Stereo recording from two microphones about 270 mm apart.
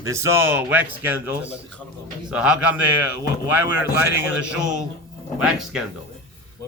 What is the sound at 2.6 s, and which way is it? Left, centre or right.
Speech, left.